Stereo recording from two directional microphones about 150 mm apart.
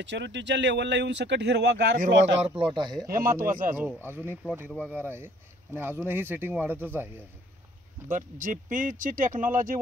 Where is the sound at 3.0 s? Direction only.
70° right (ahead or behind).